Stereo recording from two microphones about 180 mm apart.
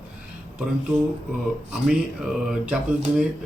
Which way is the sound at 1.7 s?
5° right (ahead or behind).